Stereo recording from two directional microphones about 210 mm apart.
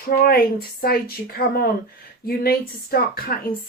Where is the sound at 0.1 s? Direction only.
45° left (ahead or behind).